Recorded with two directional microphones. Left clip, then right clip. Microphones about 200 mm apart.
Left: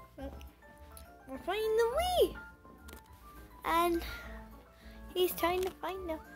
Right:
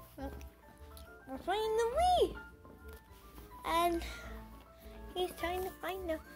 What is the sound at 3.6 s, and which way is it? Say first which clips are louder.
Speech: left 2 dB; 10° left (ahead or behind).